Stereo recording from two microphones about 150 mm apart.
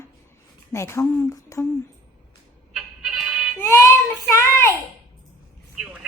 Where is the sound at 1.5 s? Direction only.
20° left (ahead or behind).